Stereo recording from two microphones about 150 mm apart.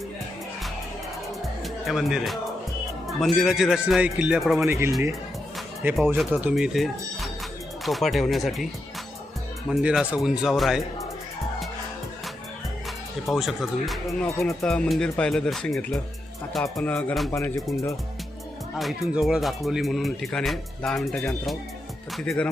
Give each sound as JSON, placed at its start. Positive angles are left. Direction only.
{"t": 1.6, "sound": "speech", "side_deg": 0}
{"t": 4.6, "sound": "speech", "side_deg": -15}
{"t": 9.6, "sound": "speech", "side_deg": 0}
{"t": 13.2, "sound": "speech", "side_deg": 0}
{"t": 17.3, "sound": "speech", "side_deg": 20}
{"t": 18.8, "sound": "speech", "side_deg": 0}